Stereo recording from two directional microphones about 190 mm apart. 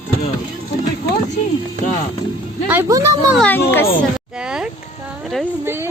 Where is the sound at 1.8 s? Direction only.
45° left (ahead or behind).